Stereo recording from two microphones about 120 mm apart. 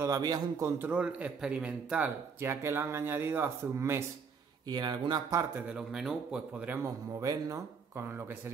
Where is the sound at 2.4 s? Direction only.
20° right (ahead or behind).